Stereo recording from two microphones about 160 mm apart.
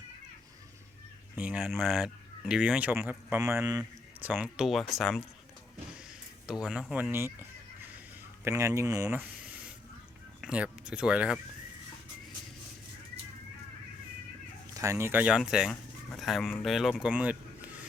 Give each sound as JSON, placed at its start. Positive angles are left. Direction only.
{"t": 1.4, "sound": "speech", "side_deg": -5}
{"t": 6.5, "sound": "speech", "side_deg": -5}
{"t": 6.9, "sound": "fowl", "side_deg": -10}
{"t": 8.4, "sound": "speech", "side_deg": -15}
{"t": 9.4, "sound": "a sound", "side_deg": -10}
{"t": 10.4, "sound": "speech", "side_deg": -5}
{"t": 14.7, "sound": "speech", "side_deg": -20}